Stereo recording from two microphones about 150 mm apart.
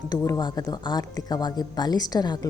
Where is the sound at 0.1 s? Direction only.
25° left (ahead or behind).